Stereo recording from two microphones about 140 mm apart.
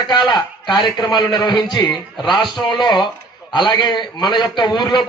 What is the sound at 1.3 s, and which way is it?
Speech, 30° left (ahead or behind).